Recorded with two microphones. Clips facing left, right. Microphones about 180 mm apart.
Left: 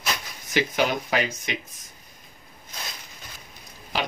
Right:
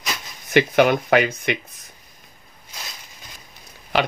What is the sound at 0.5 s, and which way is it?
Speech, 60° right (ahead or behind).